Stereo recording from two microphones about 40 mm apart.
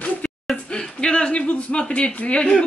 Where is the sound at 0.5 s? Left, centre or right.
Left.